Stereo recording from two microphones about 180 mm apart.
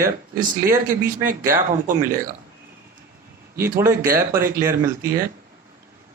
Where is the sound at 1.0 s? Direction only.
50° right (ahead or behind).